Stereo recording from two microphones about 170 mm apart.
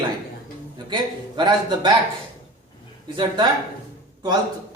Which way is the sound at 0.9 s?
25° right (ahead or behind).